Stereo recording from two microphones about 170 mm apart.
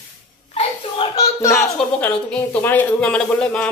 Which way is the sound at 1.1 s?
15° left (ahead or behind).